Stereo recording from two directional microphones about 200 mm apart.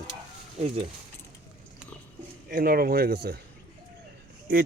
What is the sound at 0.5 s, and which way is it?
Speech, 30° right (ahead or behind).